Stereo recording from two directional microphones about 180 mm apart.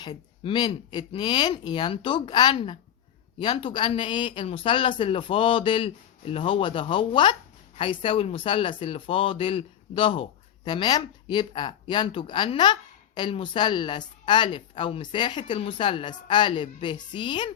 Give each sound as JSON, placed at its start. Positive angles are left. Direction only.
{"t": 0.0, "sound": "speech", "side_deg": 25}